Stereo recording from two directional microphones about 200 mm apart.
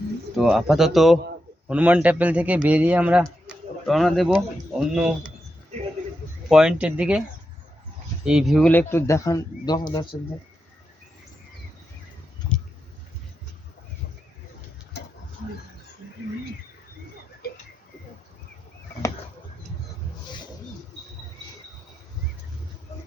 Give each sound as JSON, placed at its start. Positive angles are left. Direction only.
{"t": 0.3, "sound": "a man's voice", "side_deg": 0}
{"t": 6.5, "sound": "speech", "side_deg": -5}
{"t": 8.2, "sound": "speech", "side_deg": -5}
{"t": 17.4, "sound": "a sound", "side_deg": 50}